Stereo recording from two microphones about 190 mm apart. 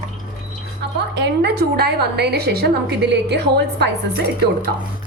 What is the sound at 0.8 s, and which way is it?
Wind chime, 60° right (ahead or behind).